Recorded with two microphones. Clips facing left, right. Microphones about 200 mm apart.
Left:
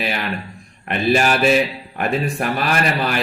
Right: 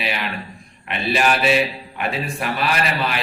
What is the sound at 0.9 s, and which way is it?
A man's voice, 45° left (ahead or behind).